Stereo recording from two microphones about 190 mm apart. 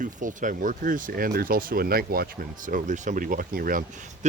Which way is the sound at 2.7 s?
40° right (ahead or behind).